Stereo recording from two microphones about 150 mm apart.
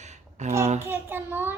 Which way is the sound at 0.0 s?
50° right (ahead or behind).